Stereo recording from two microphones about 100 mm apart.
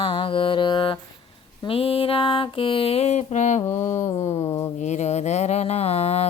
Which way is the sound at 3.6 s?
30° left (ahead or behind).